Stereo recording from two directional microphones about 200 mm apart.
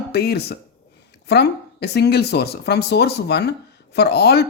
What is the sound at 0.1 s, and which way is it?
Speech, 55° left (ahead or behind).